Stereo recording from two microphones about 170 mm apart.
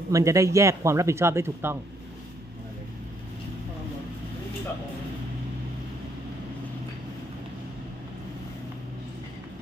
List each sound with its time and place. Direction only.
0.1 s speech: 20° right (ahead or behind)